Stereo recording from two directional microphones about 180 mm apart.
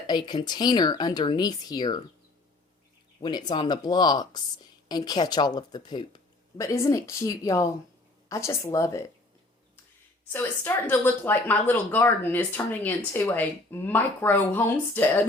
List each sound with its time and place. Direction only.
0.1 s speech: 25° left (ahead or behind)
3.2 s speech: 25° left (ahead or behind)
10.3 s speech: 10° left (ahead or behind)